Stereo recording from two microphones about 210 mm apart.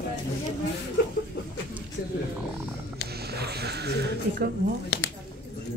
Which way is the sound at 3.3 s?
50° right (ahead or behind).